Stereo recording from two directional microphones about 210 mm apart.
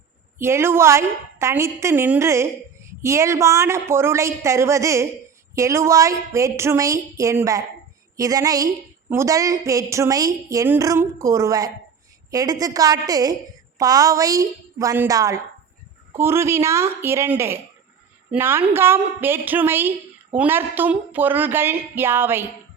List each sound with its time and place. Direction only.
0.3 s a woman's voice: 10° right (ahead or behind)